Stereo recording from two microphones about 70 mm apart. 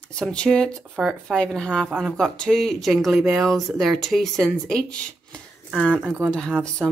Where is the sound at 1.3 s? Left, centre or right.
Centre.